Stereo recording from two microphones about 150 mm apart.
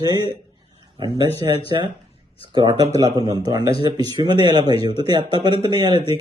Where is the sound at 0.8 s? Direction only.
30° right (ahead or behind).